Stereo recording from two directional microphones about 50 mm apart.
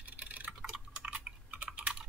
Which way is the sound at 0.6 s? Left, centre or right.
Centre.